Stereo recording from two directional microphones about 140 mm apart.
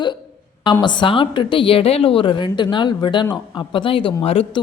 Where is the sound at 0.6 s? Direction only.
35° left (ahead or behind).